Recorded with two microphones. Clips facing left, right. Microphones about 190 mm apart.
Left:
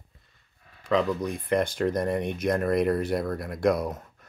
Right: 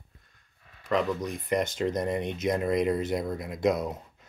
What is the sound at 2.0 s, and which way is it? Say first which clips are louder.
Speech: left 2 dB; 60° left (ahead or behind).